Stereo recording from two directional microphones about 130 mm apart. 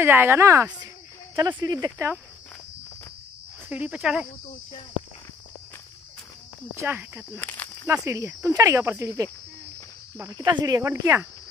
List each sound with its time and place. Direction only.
0.0 s speech: 20° right (ahead or behind)
3.6 s speech: 10° right (ahead or behind)
6.7 s speech: 15° right (ahead or behind)
7.3 s speech: 15° left (ahead or behind)
7.9 s speech: 25° right (ahead or behind)